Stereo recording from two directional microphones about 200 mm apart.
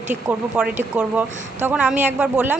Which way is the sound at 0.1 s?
5° right (ahead or behind).